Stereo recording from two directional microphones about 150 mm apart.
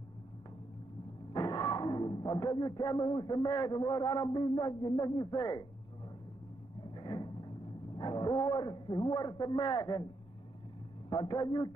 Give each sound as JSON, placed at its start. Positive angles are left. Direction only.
{"t": 1.3, "sound": "a sound", "side_deg": 25}
{"t": 3.1, "sound": "a man's voice", "side_deg": 30}
{"t": 6.9, "sound": "vehicle", "side_deg": 30}
{"t": 8.0, "sound": "a man's voice", "side_deg": 30}
{"t": 11.1, "sound": "a man's voice", "side_deg": 30}